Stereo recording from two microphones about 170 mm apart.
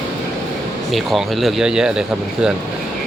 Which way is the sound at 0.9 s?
Centre (ahead or behind).